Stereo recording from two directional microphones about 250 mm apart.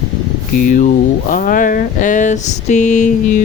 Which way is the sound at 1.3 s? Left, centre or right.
Left.